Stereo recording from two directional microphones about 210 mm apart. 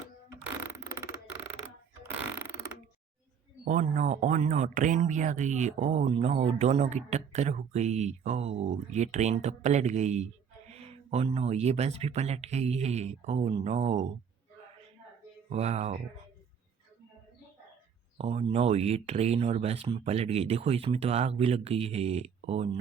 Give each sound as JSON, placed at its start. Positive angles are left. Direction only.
{"t": 3.6, "sound": "speech", "side_deg": -40}
{"t": 15.5, "sound": "speech", "side_deg": -30}
{"t": 18.2, "sound": "speech", "side_deg": -30}